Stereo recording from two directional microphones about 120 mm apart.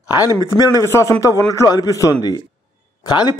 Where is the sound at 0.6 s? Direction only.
25° left (ahead or behind).